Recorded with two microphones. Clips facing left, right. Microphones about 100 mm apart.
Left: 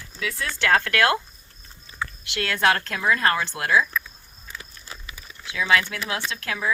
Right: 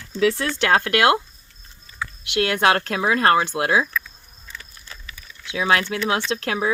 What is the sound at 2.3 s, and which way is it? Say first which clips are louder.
Speech: right 4 dB; 20° right (ahead or behind).